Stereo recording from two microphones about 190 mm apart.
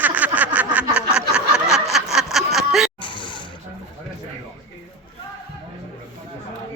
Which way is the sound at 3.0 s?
25° left (ahead or behind).